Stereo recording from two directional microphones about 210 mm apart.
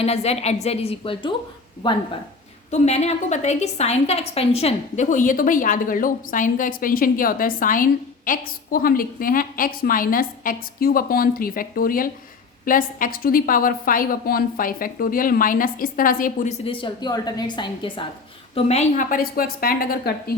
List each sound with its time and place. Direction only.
0.0 s a woman's voice: 30° left (ahead or behind); by 20.3 s 45° left (ahead or behind)